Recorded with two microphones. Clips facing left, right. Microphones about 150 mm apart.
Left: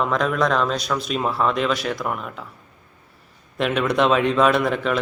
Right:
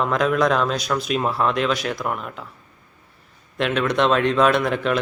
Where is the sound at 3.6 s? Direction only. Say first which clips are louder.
Even; 5° left (ahead or behind).